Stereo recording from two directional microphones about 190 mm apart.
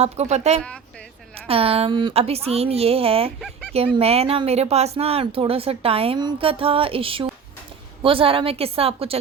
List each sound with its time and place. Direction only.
0.0 s a woman's voice: 35° right (ahead or behind)
3.4 s speech: 5° left (ahead or behind)
3.9 s a woman's voice: 30° right (ahead or behind)